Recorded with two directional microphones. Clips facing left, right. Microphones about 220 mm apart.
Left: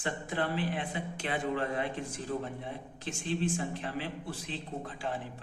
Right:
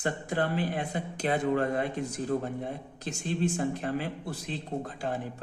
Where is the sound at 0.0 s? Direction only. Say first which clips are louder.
Right 4 dB; 40° right (ahead or behind).